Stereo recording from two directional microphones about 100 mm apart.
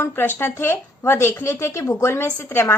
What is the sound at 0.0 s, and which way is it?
A woman's voice, 20° left (ahead or behind).